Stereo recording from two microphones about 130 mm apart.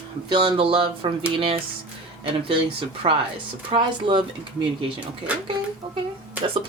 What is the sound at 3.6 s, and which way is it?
Speech, 40° right (ahead or behind).